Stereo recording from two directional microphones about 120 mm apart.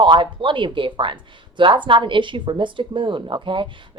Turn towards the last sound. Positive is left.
turn(degrees=-45)  # may be behind; listen again after turning